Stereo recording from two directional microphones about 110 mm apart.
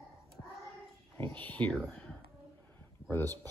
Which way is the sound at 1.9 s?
10° left (ahead or behind).